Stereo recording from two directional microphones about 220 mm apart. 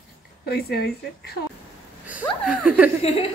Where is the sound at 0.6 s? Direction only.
45° left (ahead or behind).